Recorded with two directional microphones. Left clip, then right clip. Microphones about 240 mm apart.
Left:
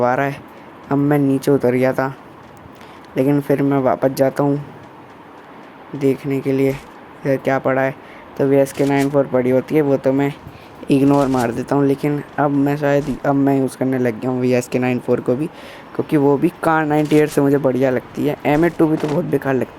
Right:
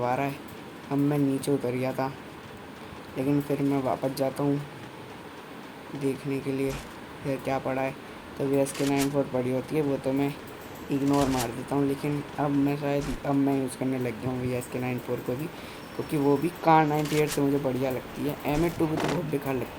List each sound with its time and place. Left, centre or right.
0.0 s speech: left
3.2 s speech: left
6.0 s speech: left
11.0 s speech: centre
11.6 s speech: left
16.0 s speech: left
17.0 s speech: centre
17.4 s speech: left
18.5 s speech: centre
19.3 s speech: left